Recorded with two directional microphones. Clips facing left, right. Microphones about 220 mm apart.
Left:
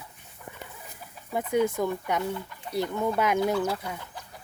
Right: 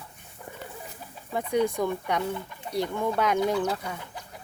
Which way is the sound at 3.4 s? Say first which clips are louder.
Even; 20° right (ahead or behind).